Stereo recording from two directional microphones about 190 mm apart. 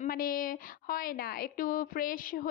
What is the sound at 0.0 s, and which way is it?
A woman's voice, 50° left (ahead or behind).